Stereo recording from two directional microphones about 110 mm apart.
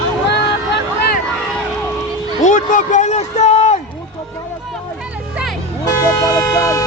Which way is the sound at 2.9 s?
90° left.